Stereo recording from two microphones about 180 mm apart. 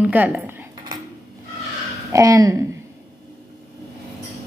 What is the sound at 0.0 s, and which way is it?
Cutlery, 10° right (ahead or behind).